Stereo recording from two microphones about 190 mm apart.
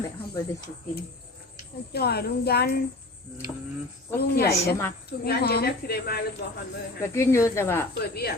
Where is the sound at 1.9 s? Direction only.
55° left (ahead or behind).